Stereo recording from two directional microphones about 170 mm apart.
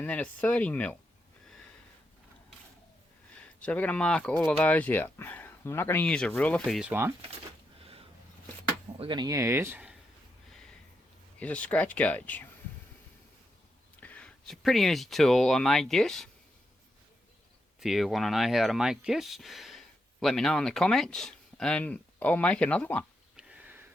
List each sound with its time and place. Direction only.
0.0 s speech: 10° left (ahead or behind)
3.6 s speech: 10° left (ahead or behind)
9.0 s speech: 25° right (ahead or behind); by 9.9 s 10° right (ahead or behind)
11.3 s speech: 10° left (ahead or behind)
14.0 s speech: 10° left (ahead or behind)
17.7 s speech: centre (ahead or behind)
23.4 s a sound: 10° right (ahead or behind)